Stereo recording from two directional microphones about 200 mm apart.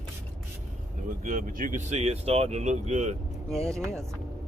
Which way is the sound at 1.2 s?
40° right (ahead or behind).